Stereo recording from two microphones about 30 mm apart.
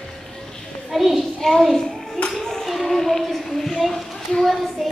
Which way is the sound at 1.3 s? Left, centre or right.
Centre.